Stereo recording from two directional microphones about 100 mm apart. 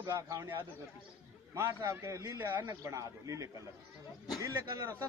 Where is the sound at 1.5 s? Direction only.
25° right (ahead or behind).